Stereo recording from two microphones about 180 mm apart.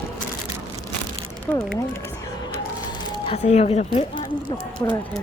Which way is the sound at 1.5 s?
10° left (ahead or behind).